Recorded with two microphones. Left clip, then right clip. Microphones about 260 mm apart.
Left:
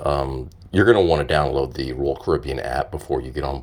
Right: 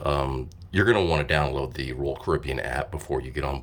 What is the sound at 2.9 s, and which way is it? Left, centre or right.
Speech, right.